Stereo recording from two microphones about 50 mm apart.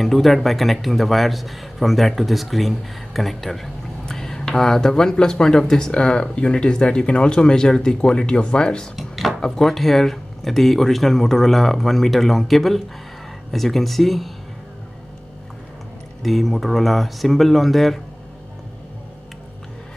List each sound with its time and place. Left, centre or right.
0.0 s a man's voice: centre
8.9 s drawer open or close: centre
9.3 s a sound: centre
9.7 s a man's voice: centre
16.2 s a man's voice: centre